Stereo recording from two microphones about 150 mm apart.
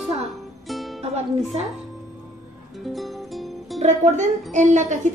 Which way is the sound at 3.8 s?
50° right (ahead or behind).